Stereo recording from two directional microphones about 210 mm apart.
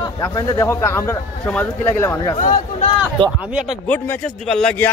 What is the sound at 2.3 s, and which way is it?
Speech, 40° left (ahead or behind).